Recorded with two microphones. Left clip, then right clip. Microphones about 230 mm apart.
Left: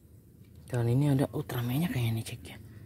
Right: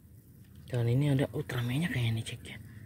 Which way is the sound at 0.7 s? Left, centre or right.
Centre.